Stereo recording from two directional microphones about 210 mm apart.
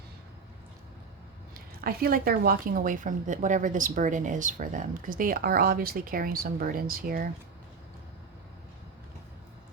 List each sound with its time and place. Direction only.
1.8 s a woman's voice: 45° right (ahead or behind)